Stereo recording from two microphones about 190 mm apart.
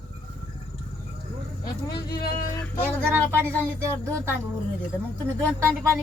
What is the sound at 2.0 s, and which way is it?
Speech, 55° left (ahead or behind).